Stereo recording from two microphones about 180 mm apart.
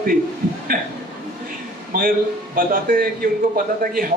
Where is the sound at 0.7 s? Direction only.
55° right (ahead or behind).